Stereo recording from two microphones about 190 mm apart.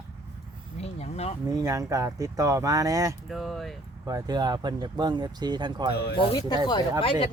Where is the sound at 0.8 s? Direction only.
30° left (ahead or behind).